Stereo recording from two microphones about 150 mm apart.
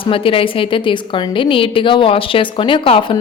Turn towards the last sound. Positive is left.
turn(degrees=35)  # may be behind; listen again after turning